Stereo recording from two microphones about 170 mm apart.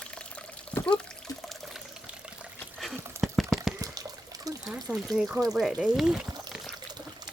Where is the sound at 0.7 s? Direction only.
10° left (ahead or behind).